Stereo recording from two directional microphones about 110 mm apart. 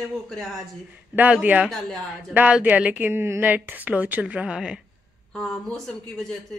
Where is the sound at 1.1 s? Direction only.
15° right (ahead or behind).